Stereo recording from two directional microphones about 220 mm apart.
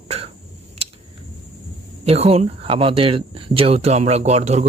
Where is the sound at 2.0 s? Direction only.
25° right (ahead or behind).